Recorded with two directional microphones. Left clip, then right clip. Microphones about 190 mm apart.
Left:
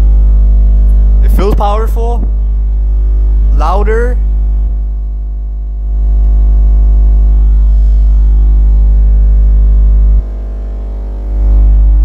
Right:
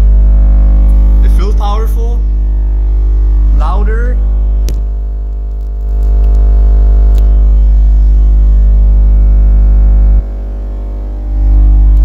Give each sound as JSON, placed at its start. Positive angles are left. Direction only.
{"t": 1.4, "sound": "music", "side_deg": 40}
{"t": 3.5, "sound": "music", "side_deg": 30}